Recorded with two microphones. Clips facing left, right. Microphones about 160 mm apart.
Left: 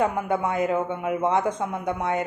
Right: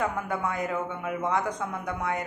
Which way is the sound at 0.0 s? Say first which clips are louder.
Left 5 dB; 25° left (ahead or behind).